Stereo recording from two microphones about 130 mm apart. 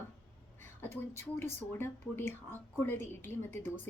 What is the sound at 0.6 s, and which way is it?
A woman's voice, 20° left (ahead or behind).